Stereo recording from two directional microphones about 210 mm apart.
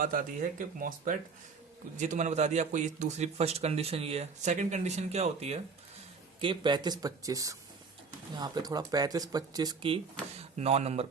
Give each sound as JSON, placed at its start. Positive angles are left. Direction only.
{"t": 0.0, "sound": "a man's voice", "side_deg": -40}